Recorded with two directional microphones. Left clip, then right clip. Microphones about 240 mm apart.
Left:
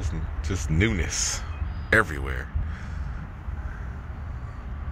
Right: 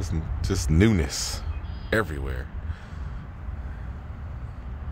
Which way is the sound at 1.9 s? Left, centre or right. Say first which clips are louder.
Left 4 dB; centre.